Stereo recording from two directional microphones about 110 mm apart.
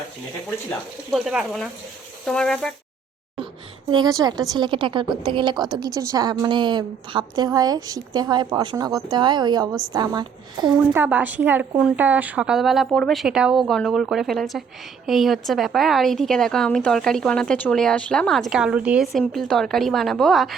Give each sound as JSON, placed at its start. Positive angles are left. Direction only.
{"t": 1.1, "sound": "a woman's voice", "side_deg": -5}
{"t": 3.3, "sound": "a woman's voice", "side_deg": -45}
{"t": 10.9, "sound": "a woman's voice", "side_deg": -15}
{"t": 19.3, "sound": "a woman's voice", "side_deg": 0}